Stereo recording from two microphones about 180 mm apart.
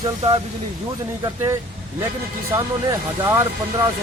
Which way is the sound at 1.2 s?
15° right (ahead or behind).